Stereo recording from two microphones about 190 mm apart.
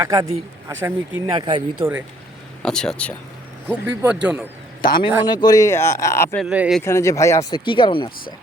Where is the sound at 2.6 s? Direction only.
5° left (ahead or behind).